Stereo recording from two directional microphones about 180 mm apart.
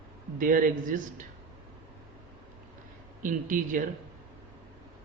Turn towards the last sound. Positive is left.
turn(degrees=-45)  # may be behind; listen again after turning